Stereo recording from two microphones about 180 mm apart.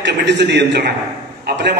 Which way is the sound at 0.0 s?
75° right (ahead or behind).